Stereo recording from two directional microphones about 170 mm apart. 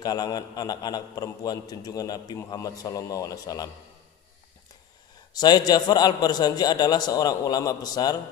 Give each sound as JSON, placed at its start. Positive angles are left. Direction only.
{"t": 0.0, "sound": "a man's voice", "side_deg": 25}
{"t": 5.3, "sound": "a man's voice", "side_deg": 25}